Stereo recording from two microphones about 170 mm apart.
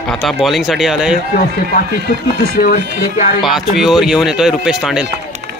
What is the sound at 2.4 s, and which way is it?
Speech, 60° left (ahead or behind).